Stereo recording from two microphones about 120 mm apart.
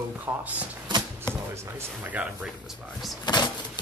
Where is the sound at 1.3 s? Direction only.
35° left (ahead or behind).